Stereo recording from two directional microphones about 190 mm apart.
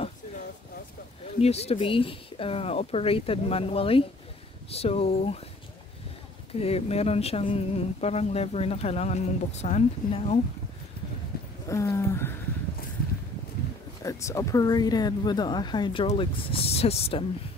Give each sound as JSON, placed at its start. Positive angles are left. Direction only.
{"t": 1.4, "sound": "speech", "side_deg": 35}
{"t": 6.6, "sound": "speech", "side_deg": 30}
{"t": 11.6, "sound": "speech", "side_deg": 15}
{"t": 14.0, "sound": "speech", "side_deg": 15}